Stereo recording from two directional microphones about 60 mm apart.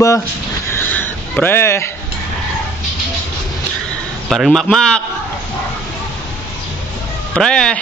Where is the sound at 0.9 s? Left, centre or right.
Left.